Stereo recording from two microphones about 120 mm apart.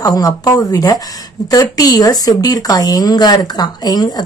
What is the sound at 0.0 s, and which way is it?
A woman's voice, 30° left (ahead or behind).